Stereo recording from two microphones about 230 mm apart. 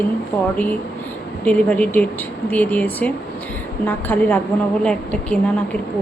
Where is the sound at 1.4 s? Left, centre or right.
Centre.